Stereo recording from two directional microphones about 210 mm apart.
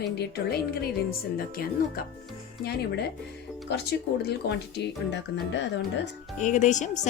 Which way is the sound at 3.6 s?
50° left (ahead or behind).